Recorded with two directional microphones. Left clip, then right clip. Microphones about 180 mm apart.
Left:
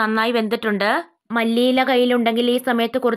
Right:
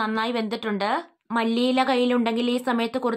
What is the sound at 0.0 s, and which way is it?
A woman's voice, 25° left (ahead or behind).